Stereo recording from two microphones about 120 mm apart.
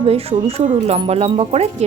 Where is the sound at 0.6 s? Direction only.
80° right; by 1.7 s 60° right (ahead or behind).